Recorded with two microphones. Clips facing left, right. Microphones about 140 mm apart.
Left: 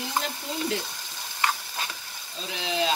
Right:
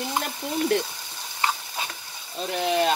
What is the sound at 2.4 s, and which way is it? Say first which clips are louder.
Speech: right 6 dB; 55° right (ahead or behind).